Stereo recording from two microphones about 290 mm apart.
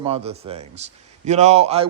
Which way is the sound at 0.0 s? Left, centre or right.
Right.